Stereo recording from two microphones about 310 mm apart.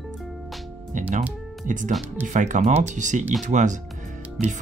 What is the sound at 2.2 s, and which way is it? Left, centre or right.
Speech, right.